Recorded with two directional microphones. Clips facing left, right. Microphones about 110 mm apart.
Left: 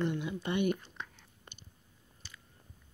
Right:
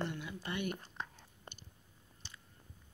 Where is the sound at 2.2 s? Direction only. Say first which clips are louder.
Left 1 dB; 30° right (ahead or behind).